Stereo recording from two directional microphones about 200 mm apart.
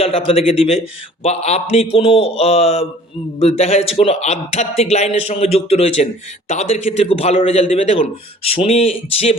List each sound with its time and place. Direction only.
0.0 s a man's voice: 30° left (ahead or behind)